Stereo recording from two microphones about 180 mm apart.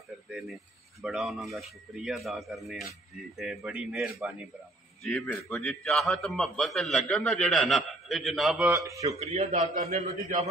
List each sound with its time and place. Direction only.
0.3 s a man's voice: centre (ahead or behind)
8.7 s a man's voice: 20° right (ahead or behind)
9.2 s a man's voice: 35° right (ahead or behind)